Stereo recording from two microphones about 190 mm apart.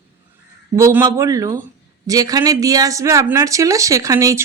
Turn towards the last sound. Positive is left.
turn(degrees=-15)  # may be behind; listen again after turning